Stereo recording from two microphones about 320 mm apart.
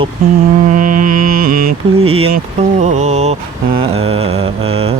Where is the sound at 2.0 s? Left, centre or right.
Centre.